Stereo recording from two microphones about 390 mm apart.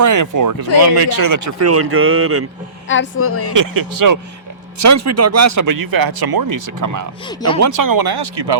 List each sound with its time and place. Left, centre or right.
0.0 s speech: right
2.9 s a woman's voice: left
3.5 s speech: right
4.8 s speech: right